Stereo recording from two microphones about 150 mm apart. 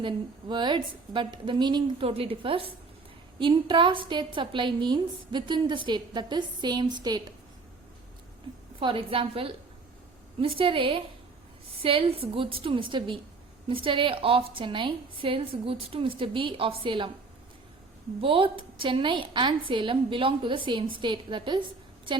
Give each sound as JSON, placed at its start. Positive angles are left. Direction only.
{"t": 0.0, "sound": "a woman's voice", "side_deg": -30}
{"t": 8.8, "sound": "a woman's voice", "side_deg": -35}
{"t": 18.2, "sound": "a woman's voice", "side_deg": -35}